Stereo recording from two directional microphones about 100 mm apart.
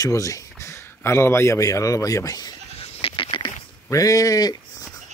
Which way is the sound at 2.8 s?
65° left (ahead or behind).